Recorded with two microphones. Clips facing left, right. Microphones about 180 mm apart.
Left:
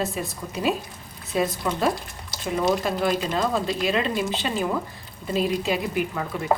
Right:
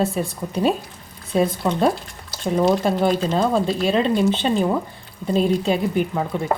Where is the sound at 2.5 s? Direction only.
30° right (ahead or behind).